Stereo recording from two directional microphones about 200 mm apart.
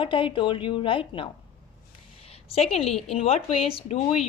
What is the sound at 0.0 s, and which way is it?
Speech, 25° left (ahead or behind).